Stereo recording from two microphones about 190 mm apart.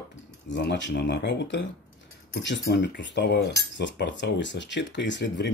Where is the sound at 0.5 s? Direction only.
65° left (ahead or behind).